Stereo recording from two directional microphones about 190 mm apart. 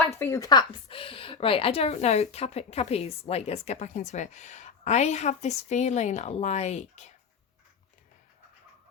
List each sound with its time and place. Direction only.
0.0 s a woman's voice: 15° left (ahead or behind); by 7.1 s 35° left (ahead or behind)